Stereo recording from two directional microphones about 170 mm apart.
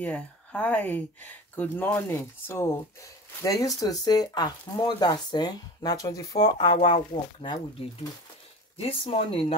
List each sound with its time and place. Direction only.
0.0 s speech: 10° left (ahead or behind); by 7.6 s 30° left (ahead or behind)
8.7 s speech: 35° left (ahead or behind)